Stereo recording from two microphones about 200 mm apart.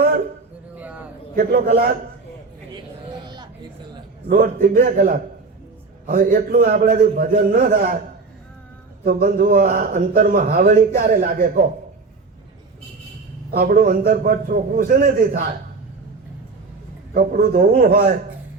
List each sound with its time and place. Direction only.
0.8 s a sound: 5° right (ahead or behind)
1.4 s a man's voice: 45° right (ahead or behind)
3.1 s a sound: 20° right (ahead or behind)
4.3 s a man's voice: 40° right (ahead or behind)
9.0 s a man's voice: 45° right (ahead or behind)
13.5 s a man's voice: 50° right (ahead or behind)
17.2 s a man's voice: 45° right (ahead or behind)